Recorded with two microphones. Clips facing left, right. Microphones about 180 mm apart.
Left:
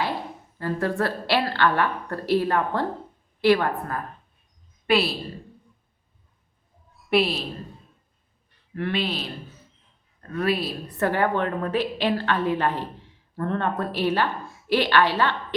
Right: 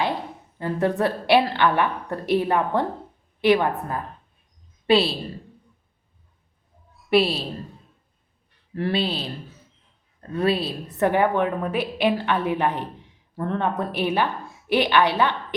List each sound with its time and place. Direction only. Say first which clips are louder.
0.6 s a woman's voice: right 3 dB; 20° right (ahead or behind)
7.0 s a sound: right 2 dB; centre (ahead or behind)
8.7 s speech: right 2 dB; 30° right (ahead or behind)
10.3 s a woman's voice: right 2 dB; 30° right (ahead or behind)
13.4 s speech: right 1 dB; centre (ahead or behind)
13.7 s a woman's voice: even; 15° right (ahead or behind)